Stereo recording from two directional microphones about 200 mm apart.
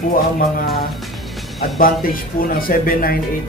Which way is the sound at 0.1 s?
45° left (ahead or behind).